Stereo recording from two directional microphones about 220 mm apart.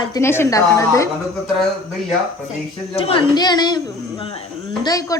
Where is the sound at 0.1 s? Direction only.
10° left (ahead or behind).